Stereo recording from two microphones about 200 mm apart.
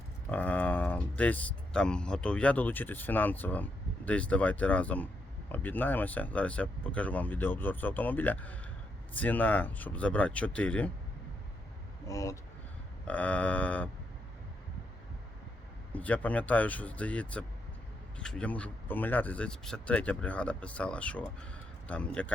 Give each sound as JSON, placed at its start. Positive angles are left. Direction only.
{"t": 0.3, "sound": "speech", "side_deg": 5}
{"t": 12.0, "sound": "speech", "side_deg": 15}
{"t": 15.9, "sound": "a man's voice", "side_deg": 5}